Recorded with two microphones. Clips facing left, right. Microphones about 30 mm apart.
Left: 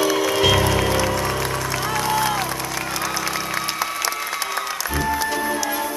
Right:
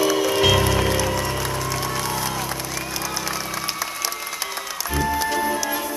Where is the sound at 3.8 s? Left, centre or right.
Centre.